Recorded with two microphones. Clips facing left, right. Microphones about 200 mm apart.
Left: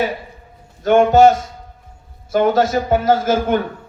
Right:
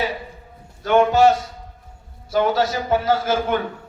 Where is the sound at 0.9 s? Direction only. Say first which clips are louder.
Left 4 dB; 45° left (ahead or behind).